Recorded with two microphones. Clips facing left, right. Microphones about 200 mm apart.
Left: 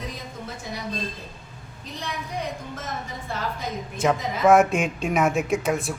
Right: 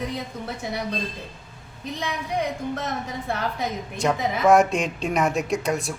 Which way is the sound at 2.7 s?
65° right (ahead or behind).